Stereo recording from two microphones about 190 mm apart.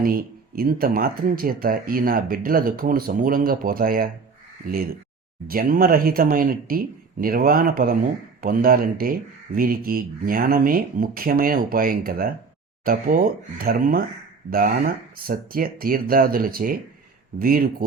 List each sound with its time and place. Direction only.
0.0 s speech: 50° right (ahead or behind)
5.5 s speech: 50° right (ahead or behind)